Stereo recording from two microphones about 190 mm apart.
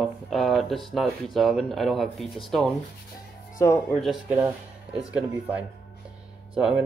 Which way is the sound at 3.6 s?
15° left (ahead or behind).